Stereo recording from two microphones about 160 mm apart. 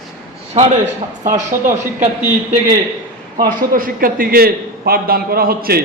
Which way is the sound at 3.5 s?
60° right (ahead or behind).